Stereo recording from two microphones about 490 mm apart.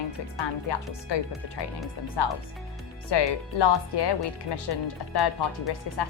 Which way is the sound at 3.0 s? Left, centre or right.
Left.